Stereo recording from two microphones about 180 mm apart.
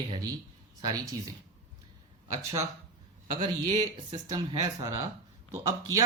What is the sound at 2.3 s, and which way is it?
A woman's voice, 15° right (ahead or behind).